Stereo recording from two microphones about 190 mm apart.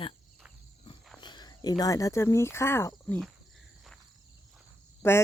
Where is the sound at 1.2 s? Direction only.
20° left (ahead or behind).